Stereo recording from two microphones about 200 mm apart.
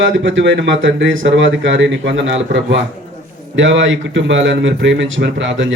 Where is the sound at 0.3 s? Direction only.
65° right (ahead or behind).